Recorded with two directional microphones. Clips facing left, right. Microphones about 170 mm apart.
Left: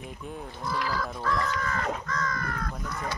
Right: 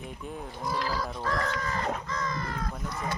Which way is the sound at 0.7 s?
35° right (ahead or behind).